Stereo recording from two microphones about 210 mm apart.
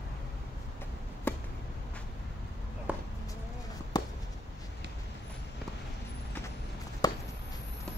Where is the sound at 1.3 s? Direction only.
10° left (ahead or behind).